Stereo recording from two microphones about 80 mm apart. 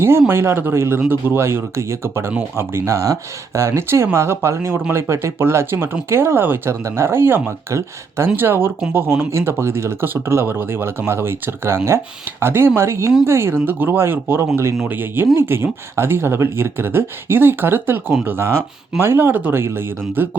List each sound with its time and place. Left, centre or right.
0.0 s speech: right
18.1 s speech: centre
18.3 s speech: right